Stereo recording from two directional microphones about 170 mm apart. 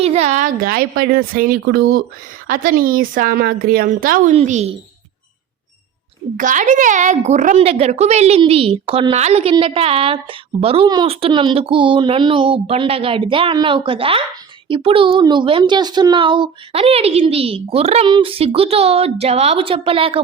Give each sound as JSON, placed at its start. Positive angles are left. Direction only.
{"t": 0.0, "sound": "speech", "side_deg": -40}
{"t": 2.5, "sound": "speech", "side_deg": -55}
{"t": 4.4, "sound": "a woman's voice", "side_deg": -40}
{"t": 6.3, "sound": "a woman's voice", "side_deg": -50}